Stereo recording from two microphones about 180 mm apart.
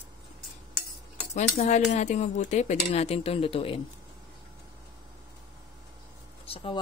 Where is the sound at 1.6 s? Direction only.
40° left (ahead or behind).